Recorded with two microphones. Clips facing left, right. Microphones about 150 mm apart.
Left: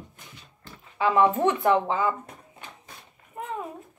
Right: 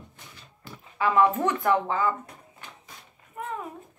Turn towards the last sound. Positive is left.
turn(degrees=25)  # may be behind; listen again after turning